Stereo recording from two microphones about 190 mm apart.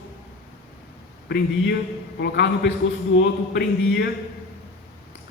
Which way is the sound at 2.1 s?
65° left (ahead or behind).